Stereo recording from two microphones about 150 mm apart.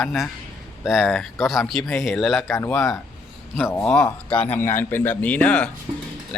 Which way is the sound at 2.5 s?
15° left (ahead or behind).